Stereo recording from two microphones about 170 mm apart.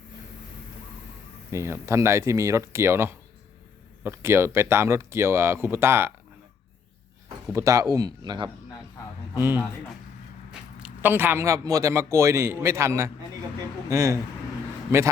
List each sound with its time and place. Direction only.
1.5 s a man's voice: 15° right (ahead or behind)
7.5 s speech: 20° right (ahead or behind)
9.4 s a man's voice: 10° right (ahead or behind)
10.8 s a man's voice: 10° right (ahead or behind)